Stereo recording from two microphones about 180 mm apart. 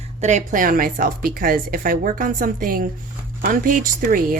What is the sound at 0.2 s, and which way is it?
Speech, 40° right (ahead or behind).